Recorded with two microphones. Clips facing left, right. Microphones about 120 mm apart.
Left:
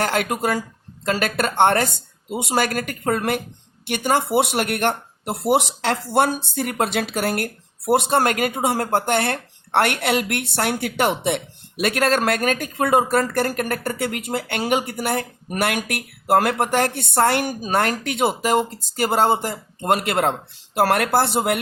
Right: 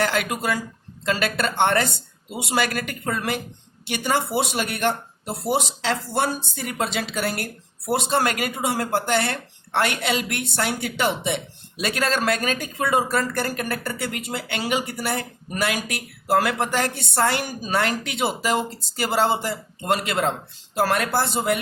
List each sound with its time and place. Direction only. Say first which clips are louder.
0.0 s speech: left 2 dB; 50° left (ahead or behind)